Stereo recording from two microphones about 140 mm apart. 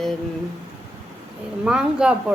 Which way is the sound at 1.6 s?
5° right (ahead or behind).